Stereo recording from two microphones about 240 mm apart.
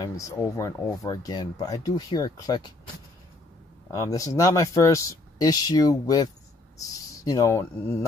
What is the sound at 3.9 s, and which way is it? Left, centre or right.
Speech, centre.